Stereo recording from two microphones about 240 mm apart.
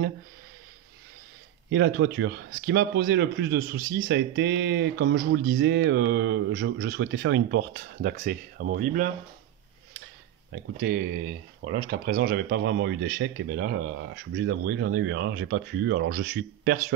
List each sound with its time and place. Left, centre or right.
1.7 s speech: right
10.5 s speech: right